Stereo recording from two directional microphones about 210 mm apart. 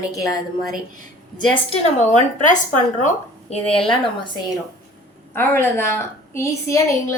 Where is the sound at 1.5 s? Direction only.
30° left (ahead or behind).